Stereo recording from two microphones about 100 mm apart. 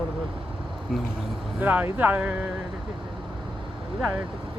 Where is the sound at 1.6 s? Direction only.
15° right (ahead or behind).